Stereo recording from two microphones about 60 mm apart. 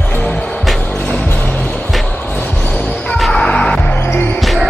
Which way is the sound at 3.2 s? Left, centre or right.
Centre.